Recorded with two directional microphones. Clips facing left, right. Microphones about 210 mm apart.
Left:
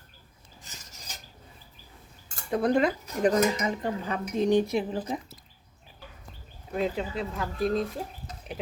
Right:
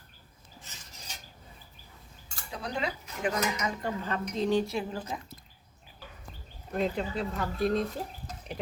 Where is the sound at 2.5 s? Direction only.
50° left (ahead or behind); by 3.7 s 35° left (ahead or behind).